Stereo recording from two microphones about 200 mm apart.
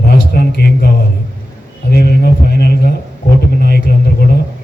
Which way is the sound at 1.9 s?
50° left (ahead or behind).